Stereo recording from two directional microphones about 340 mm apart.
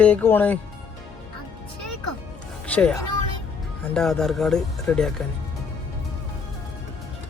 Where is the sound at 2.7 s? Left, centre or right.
Centre.